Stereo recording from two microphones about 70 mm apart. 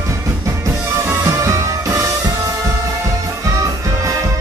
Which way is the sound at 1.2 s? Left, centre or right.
Right.